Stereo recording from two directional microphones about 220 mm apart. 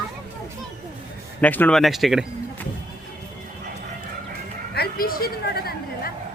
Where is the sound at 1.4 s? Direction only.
5° left (ahead or behind).